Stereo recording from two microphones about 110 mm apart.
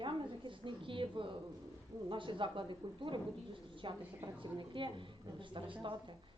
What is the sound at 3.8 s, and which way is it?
Speech, 50° right (ahead or behind).